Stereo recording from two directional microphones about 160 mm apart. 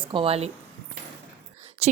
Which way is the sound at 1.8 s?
40° right (ahead or behind).